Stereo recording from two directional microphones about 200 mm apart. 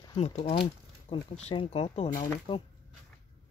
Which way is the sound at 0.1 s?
35° left (ahead or behind).